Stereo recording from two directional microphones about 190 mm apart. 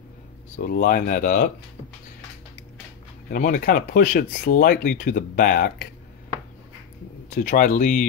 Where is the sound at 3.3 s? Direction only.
45° left (ahead or behind).